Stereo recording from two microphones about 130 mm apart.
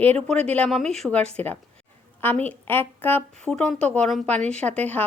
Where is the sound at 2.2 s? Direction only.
15° left (ahead or behind).